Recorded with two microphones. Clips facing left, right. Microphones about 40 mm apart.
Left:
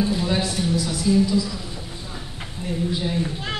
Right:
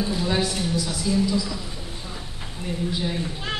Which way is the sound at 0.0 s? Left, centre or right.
Centre.